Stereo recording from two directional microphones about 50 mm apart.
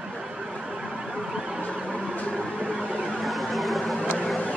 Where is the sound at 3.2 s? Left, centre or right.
Centre.